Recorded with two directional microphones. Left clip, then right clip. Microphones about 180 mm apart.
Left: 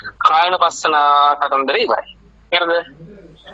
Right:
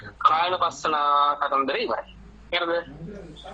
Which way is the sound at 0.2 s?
40° left (ahead or behind).